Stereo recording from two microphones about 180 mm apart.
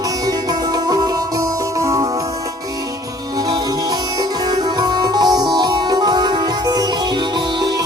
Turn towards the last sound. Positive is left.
turn(degrees=-20)  # may be behind; listen again after turning